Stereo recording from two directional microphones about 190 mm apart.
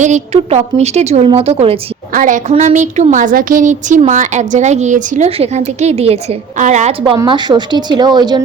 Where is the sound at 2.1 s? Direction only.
45° right (ahead or behind).